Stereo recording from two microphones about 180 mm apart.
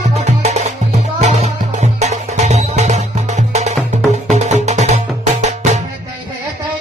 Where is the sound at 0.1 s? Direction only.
40° right (ahead or behind).